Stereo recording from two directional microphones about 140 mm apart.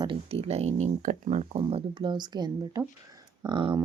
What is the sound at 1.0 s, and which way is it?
Speech, 70° right (ahead or behind).